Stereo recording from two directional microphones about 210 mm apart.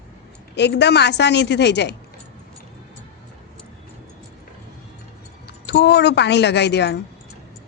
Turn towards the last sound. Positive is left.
turn(degrees=55)  # may be behind; listen again after turning